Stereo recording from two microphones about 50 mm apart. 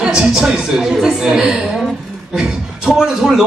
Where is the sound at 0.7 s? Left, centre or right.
Centre.